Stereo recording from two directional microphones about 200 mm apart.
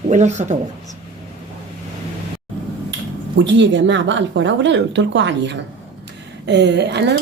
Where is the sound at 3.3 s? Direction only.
65° right (ahead or behind).